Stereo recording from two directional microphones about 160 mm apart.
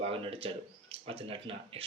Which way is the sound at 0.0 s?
35° right (ahead or behind).